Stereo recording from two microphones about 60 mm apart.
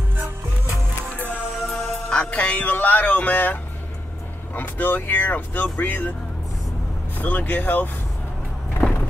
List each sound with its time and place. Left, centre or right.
1.7 s music: centre; by 3.5 s left
4.6 s speech: left
7.2 s speech: left